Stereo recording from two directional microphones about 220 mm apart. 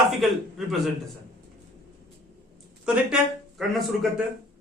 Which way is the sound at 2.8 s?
5° right (ahead or behind).